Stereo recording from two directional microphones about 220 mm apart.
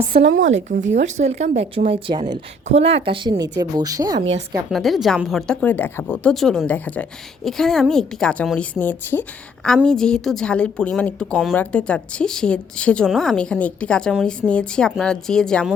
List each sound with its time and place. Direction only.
0.1 s a woman's voice: 50° right (ahead or behind)
1.1 s a woman's voice: 30° right (ahead or behind)
4.7 s a woman's voice: centre (ahead or behind)